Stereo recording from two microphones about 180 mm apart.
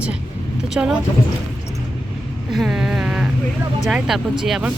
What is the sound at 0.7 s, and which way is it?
Speech, 5° right (ahead or behind).